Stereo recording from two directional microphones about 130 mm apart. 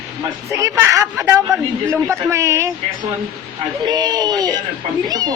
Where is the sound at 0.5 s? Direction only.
25° right (ahead or behind).